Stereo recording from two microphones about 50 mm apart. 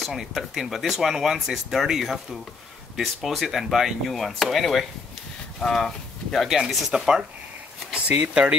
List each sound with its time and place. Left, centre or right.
0.0 s speech: centre
6.4 s speech: centre
7.9 s speech: right